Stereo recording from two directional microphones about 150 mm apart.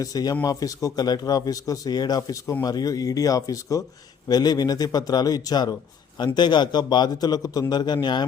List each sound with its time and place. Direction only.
0.0 s speech: 25° left (ahead or behind)